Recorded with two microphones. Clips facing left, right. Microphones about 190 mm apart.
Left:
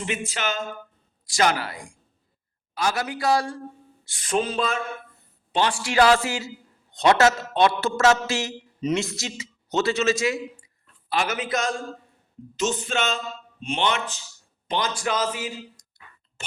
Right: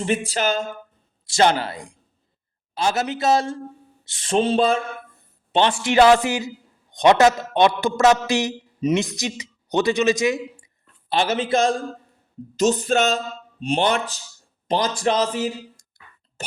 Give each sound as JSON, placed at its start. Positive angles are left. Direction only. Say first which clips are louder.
{"t": 0.0, "sound": "a man's voice", "louder": "right 6 dB", "side_deg": -35}
{"t": 11.1, "sound": "a man's voice", "louder": "right 5 dB", "side_deg": -30}